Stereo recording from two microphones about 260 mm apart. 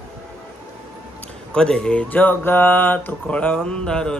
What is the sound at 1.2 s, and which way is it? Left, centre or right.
A man's voice, centre.